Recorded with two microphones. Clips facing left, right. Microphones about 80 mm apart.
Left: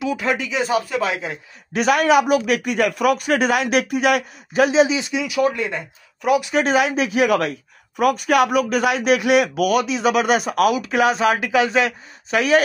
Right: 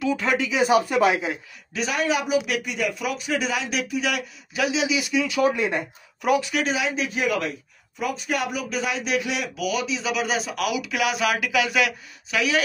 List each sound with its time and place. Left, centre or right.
0.0 s speech: centre
0.5 s speech: centre
1.7 s speech: left
5.4 s speech: centre
6.7 s speech: left
12.4 s speech: left